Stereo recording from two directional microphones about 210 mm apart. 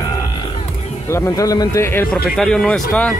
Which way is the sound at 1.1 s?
15° left (ahead or behind).